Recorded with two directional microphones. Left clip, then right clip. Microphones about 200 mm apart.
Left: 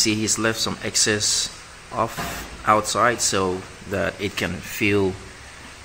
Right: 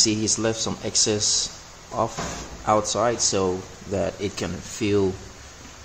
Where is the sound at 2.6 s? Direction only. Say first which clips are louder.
Left 3 dB; centre (ahead or behind).